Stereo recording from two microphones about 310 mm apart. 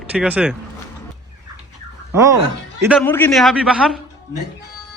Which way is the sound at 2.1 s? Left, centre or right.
Centre.